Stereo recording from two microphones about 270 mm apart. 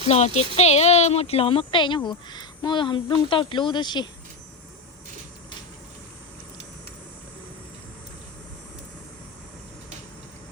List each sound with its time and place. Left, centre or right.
0.0 s speech: left